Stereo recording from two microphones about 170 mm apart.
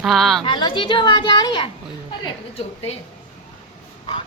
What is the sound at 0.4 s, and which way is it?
A woman's voice, 30° left (ahead or behind).